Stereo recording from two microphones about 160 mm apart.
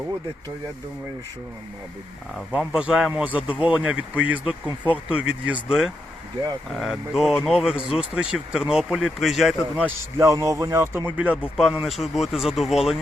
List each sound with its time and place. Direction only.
2.5 s a man's voice: 5° right (ahead or behind)
9.8 s a man's voice: 20° right (ahead or behind); by 13.0 s centre (ahead or behind)